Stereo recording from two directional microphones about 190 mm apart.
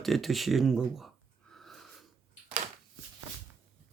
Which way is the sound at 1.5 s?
Centre (ahead or behind).